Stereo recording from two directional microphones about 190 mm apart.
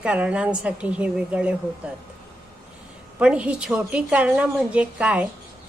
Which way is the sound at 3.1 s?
5° right (ahead or behind).